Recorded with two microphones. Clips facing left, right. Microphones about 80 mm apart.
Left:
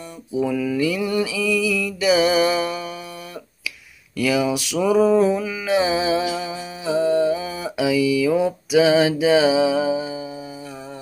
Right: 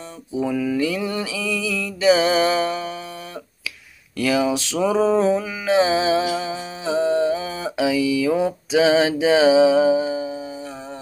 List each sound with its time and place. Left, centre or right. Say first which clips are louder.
0.3 s mantra: even; right
4.2 s mantra: even; right